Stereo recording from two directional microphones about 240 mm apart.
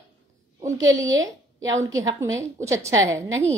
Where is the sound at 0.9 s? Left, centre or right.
Centre.